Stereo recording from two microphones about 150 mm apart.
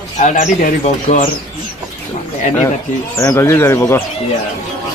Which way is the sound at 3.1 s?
20° left (ahead or behind).